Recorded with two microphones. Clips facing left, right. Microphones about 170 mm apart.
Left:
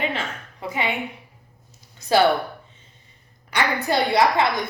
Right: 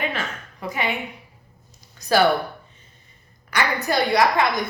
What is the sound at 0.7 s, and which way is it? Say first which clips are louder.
Speech: even; 25° left (ahead or behind).